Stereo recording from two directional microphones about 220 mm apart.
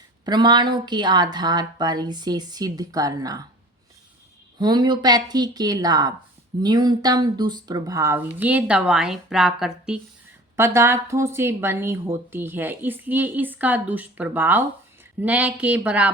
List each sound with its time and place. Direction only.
0.3 s speech: 20° right (ahead or behind)
4.5 s a woman's voice: 20° right (ahead or behind)